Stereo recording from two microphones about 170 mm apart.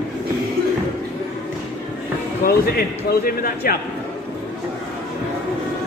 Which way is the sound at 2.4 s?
65° left (ahead or behind).